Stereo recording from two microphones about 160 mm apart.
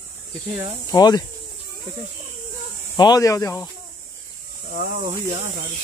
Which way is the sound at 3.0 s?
25° left (ahead or behind).